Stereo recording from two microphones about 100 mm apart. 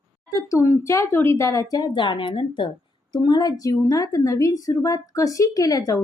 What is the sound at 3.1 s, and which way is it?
Speech, 45° left (ahead or behind).